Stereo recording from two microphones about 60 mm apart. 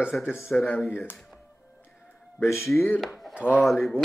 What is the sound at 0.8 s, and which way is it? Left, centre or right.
Speech, left.